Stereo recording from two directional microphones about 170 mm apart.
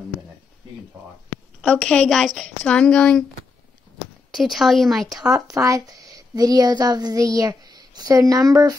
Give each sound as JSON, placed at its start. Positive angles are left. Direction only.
{"t": 1.6, "sound": "a woman's voice", "side_deg": 5}
{"t": 4.3, "sound": "a woman's voice", "side_deg": 0}
{"t": 5.3, "sound": "speech", "side_deg": -20}